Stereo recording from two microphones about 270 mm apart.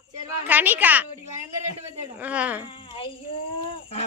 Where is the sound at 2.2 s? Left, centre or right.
Centre.